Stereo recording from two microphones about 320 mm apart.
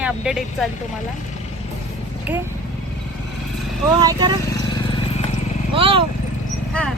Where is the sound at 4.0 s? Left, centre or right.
Centre.